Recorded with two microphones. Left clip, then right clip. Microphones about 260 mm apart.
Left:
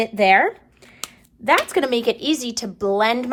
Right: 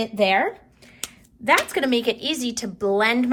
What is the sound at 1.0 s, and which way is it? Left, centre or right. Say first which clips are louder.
Speech: left 2 dB; centre.